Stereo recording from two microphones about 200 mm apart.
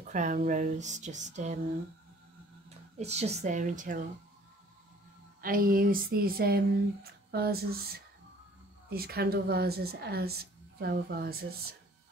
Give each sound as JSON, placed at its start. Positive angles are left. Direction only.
{"t": 0.0, "sound": "speech", "side_deg": -40}
{"t": 3.0, "sound": "speech", "side_deg": -30}
{"t": 5.4, "sound": "speech", "side_deg": -45}